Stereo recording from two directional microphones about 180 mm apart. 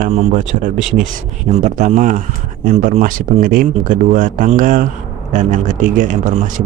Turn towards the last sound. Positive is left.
turn(degrees=-45)  # may be behind; listen again after turning